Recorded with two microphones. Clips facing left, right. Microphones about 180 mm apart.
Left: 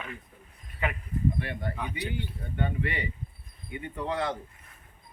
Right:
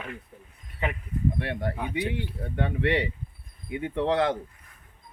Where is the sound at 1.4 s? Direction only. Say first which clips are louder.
Right 4 dB; 75° right (ahead or behind); by 4.4 s 90° right.